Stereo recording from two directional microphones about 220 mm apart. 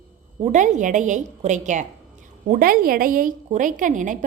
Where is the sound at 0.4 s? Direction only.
35° right (ahead or behind).